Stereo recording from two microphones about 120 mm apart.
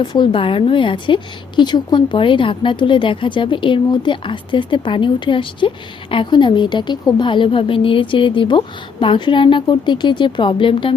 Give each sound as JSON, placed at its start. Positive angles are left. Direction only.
{"t": 0.0, "sound": "a woman's voice", "side_deg": 40}